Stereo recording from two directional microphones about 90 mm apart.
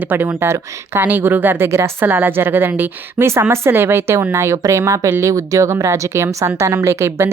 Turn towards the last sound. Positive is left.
turn(degrees=-30)  # may be behind; listen again after turning